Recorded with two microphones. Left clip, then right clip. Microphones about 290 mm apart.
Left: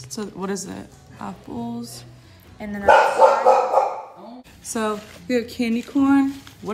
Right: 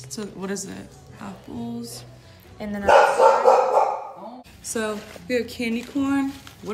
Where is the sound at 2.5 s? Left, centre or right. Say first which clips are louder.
Right 1 dB; centre.